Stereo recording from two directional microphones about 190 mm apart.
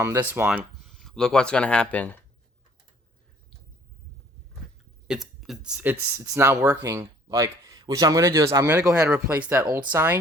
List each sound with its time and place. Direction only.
0.0 s speech: 15° right (ahead or behind); by 2.2 s 10° left (ahead or behind)
5.0 s speech: centre (ahead or behind)